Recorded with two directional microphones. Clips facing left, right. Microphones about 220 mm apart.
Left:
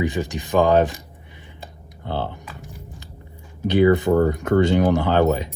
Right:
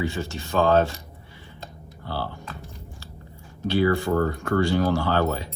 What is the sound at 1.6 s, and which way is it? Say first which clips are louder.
Typing: left 4 dB; 20° left (ahead or behind).